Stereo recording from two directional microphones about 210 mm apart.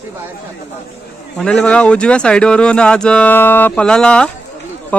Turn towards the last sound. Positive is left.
turn(degrees=5)  # may be behind; listen again after turning